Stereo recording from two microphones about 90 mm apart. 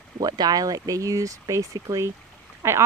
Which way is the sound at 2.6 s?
30° right (ahead or behind).